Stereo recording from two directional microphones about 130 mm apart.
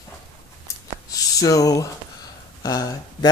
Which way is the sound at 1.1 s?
25° left (ahead or behind).